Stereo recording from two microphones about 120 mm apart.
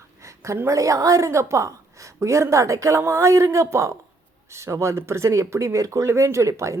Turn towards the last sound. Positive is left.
turn(degrees=-25)  # may be behind; listen again after turning